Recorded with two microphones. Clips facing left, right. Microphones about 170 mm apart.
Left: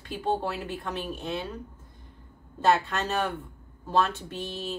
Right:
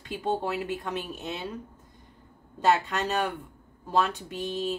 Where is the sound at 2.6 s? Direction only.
15° right (ahead or behind).